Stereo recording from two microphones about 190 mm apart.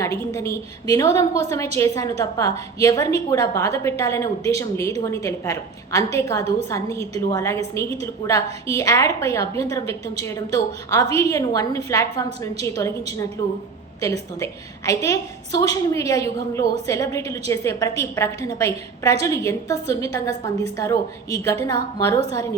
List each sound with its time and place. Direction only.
0.0 s a woman's voice: 15° left (ahead or behind)